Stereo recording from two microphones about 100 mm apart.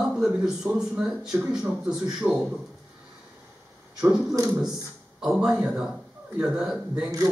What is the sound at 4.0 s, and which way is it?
Speech, 10° right (ahead or behind).